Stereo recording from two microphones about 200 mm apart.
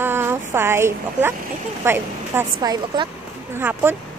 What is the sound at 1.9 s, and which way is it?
Speech, 15° right (ahead or behind).